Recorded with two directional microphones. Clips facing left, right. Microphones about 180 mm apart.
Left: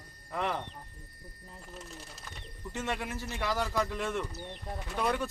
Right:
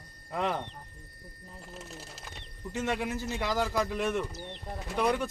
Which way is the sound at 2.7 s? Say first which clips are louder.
Right 4 dB; 15° right (ahead or behind).